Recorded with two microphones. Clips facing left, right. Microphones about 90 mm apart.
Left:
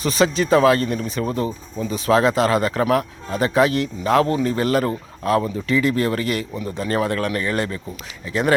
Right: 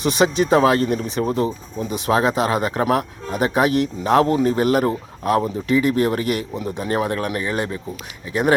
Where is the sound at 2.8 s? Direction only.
25° right (ahead or behind).